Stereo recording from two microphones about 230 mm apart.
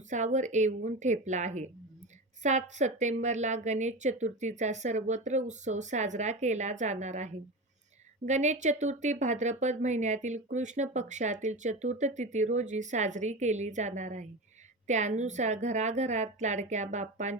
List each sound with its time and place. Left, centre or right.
0.1 s speech: right